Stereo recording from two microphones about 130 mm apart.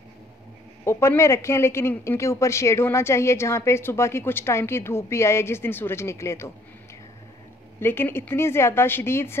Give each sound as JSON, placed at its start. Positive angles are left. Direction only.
{"t": 0.8, "sound": "a man's voice", "side_deg": 20}
{"t": 7.8, "sound": "a man's voice", "side_deg": 15}